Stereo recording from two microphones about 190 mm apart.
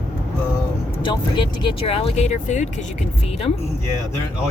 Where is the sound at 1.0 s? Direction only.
25° left (ahead or behind).